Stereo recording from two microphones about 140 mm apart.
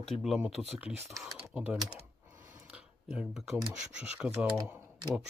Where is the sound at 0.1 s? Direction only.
Centre (ahead or behind).